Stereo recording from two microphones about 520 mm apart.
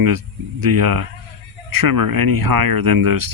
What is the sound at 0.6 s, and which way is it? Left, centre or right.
Speech, right.